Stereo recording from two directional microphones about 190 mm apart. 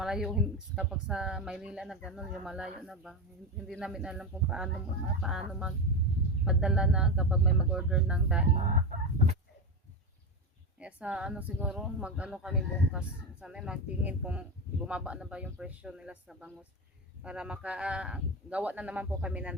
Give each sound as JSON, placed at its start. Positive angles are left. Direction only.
{"t": 0.0, "sound": "speech", "side_deg": 0}
{"t": 8.6, "sound": "chicken", "side_deg": -35}
{"t": 10.8, "sound": "speech", "side_deg": -5}